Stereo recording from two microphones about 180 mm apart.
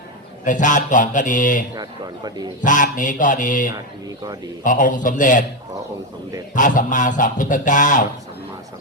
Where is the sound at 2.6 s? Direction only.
45° left (ahead or behind).